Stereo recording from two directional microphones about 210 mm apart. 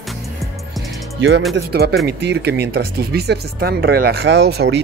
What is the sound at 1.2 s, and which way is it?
Speech, 55° right (ahead or behind).